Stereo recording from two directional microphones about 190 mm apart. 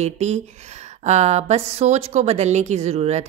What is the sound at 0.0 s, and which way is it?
A woman's voice, 35° right (ahead or behind).